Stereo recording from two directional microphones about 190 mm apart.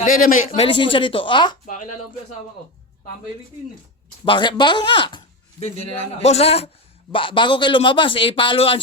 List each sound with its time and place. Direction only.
0.0 s a man's voice: 45° left (ahead or behind); by 1.5 s 25° left (ahead or behind)
1.6 s speech: 45° left (ahead or behind)
4.3 s a man's voice: 25° left (ahead or behind)